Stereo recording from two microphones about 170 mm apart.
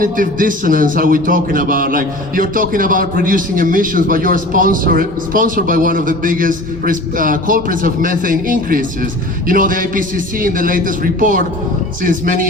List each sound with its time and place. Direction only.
0.0 s a man's voice: 55° right (ahead or behind)